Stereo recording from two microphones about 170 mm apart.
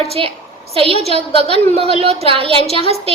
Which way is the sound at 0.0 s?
35° right (ahead or behind).